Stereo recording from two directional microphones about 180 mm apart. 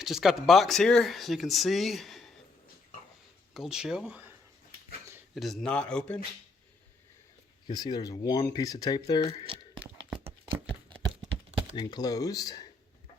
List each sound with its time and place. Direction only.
0.0 s speech: centre (ahead or behind)
3.5 s speech: centre (ahead or behind)
7.7 s speech: 25° left (ahead or behind)
10.2 s a sound: 25° right (ahead or behind)
11.8 s speech: 20° left (ahead or behind)